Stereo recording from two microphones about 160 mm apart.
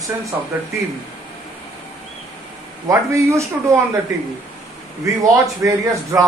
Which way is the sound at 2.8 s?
20° right (ahead or behind).